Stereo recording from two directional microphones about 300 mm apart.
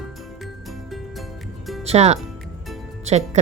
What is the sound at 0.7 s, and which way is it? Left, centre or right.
Music, centre.